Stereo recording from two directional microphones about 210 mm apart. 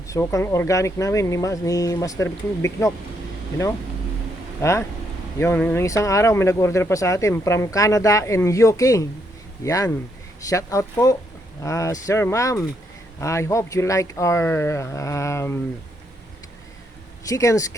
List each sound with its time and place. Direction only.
0.1 s speech: 15° left (ahead or behind)
4.6 s speech: 15° left (ahead or behind)
17.2 s speech: 15° left (ahead or behind)